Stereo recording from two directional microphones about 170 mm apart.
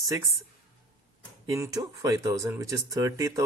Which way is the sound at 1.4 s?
20° right (ahead or behind).